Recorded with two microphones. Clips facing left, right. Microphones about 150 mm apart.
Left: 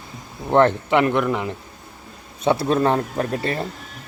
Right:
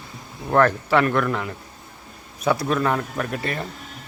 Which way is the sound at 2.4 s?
30° left (ahead or behind).